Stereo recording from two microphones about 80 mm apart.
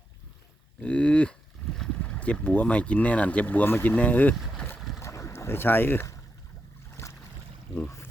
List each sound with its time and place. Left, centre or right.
0.8 s a sound: centre
2.0 s speech: centre
4.9 s boat: left